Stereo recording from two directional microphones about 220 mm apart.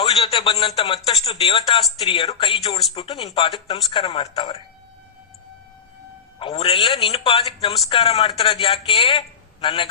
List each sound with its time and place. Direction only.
0.0 s a sound: 25° left (ahead or behind)
0.8 s a man's voice: 25° left (ahead or behind)
6.4 s a man's voice: 25° left (ahead or behind)